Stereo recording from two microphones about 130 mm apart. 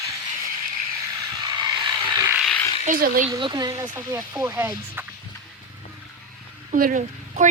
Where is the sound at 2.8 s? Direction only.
90° right.